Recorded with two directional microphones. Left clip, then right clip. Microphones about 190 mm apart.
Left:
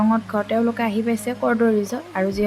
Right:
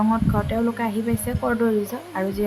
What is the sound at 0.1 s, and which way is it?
A woman's voice, 15° left (ahead or behind).